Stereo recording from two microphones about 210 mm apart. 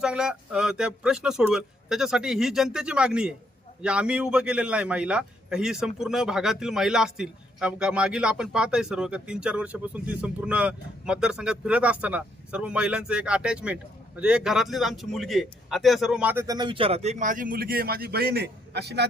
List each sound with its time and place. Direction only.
0.0 s a man's voice: 5° right (ahead or behind); by 19.0 s 50° right (ahead or behind)